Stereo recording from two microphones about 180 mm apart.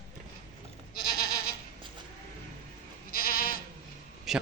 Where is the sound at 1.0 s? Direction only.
55° left (ahead or behind).